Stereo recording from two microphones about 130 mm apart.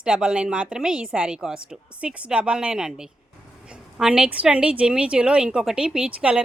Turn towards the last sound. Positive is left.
turn(degrees=-10)  # may be behind; listen again after turning